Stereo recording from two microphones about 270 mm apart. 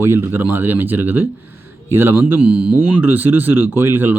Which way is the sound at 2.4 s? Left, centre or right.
Right.